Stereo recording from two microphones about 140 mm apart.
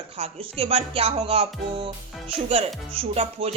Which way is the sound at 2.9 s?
45° right (ahead or behind).